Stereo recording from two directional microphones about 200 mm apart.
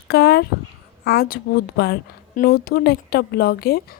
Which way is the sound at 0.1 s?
55° left (ahead or behind).